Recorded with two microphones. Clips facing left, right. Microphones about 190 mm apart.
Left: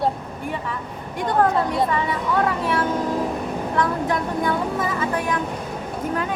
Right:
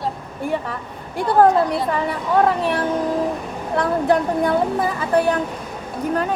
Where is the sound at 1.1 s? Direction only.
35° right (ahead or behind).